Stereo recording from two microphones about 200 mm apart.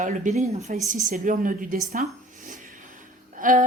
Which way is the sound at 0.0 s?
40° right (ahead or behind).